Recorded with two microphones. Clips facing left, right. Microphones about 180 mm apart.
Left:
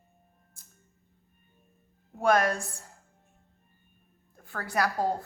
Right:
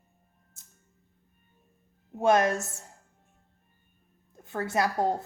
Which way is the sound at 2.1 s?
20° right (ahead or behind).